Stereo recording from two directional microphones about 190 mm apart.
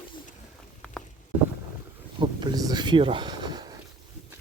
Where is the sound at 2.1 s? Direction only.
25° right (ahead or behind).